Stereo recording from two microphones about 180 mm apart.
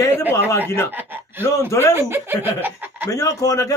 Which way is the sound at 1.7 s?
15° left (ahead or behind).